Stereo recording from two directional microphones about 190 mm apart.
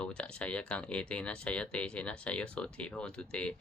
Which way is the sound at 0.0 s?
5° left (ahead or behind).